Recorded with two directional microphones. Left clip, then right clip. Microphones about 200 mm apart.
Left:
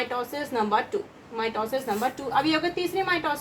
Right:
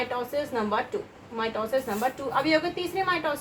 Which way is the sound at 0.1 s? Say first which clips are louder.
Even; 20° left (ahead or behind).